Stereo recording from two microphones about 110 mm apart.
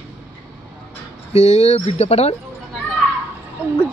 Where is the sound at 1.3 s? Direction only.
85° left.